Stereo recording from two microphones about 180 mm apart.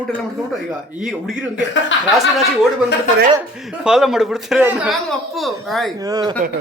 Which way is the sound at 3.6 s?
5° right (ahead or behind).